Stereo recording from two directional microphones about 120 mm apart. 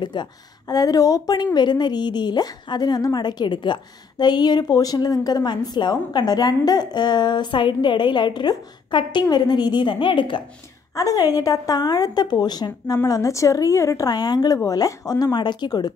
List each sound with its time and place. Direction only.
0.0 s a woman's voice: 40° left (ahead or behind)
11.0 s a woman's voice: 30° left (ahead or behind)